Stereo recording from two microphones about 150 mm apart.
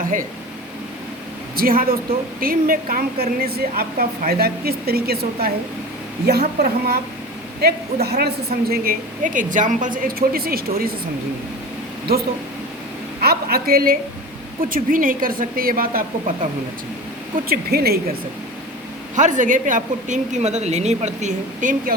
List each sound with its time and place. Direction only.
1.5 s a woman's voice: 75° right (ahead or behind); by 7.0 s 90° right
8.0 s a woman's voice: 90° right
8.7 s a woman's voice: 75° right (ahead or behind)
13.2 s a man's voice: 85° right
14.6 s a woman's voice: 70° right (ahead or behind)
17.5 s a woman's voice: 90° right
19.1 s a woman's voice: 55° right (ahead or behind)